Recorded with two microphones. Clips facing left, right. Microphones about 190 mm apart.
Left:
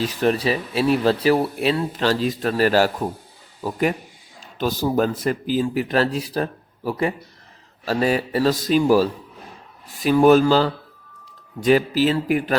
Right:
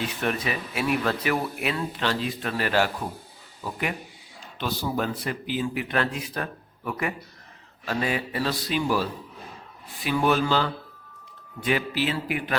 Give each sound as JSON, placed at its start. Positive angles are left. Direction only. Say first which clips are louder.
{"t": 0.0, "sound": "speech", "louder": "left 8 dB", "side_deg": 35}